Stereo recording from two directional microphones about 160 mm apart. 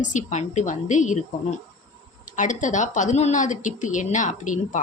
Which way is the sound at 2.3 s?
50° left (ahead or behind).